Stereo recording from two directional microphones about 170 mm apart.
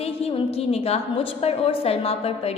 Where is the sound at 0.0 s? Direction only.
35° left (ahead or behind).